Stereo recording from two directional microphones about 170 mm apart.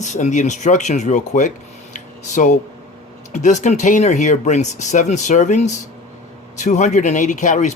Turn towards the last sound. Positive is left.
turn(degrees=45)  # may be behind; listen again after turning